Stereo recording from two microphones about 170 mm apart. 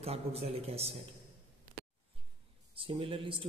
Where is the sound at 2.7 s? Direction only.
30° right (ahead or behind).